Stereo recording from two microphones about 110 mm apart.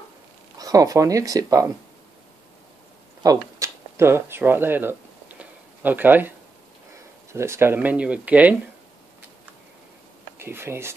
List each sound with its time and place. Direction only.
0.6 s speech: 35° right (ahead or behind)
3.2 s speech: 30° right (ahead or behind)
5.4 s a sound: 15° right (ahead or behind)
7.3 s speech: 25° right (ahead or behind)
10.4 s speech: 20° right (ahead or behind)